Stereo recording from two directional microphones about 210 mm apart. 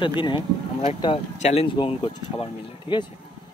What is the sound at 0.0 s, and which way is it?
Speech, 20° left (ahead or behind).